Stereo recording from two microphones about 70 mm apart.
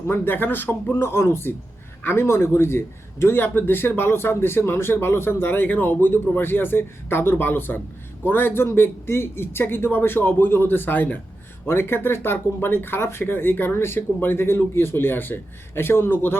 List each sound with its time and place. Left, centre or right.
0.1 s speech: left
0.9 s a man's voice: left